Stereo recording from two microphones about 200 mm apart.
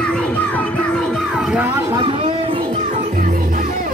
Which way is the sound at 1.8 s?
15° right (ahead or behind).